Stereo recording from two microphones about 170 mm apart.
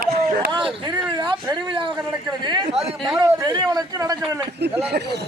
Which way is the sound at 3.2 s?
25° right (ahead or behind).